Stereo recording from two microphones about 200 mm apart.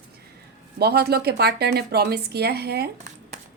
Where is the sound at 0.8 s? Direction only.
55° right (ahead or behind).